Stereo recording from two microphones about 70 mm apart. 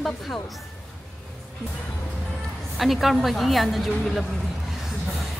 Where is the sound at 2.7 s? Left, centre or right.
Centre.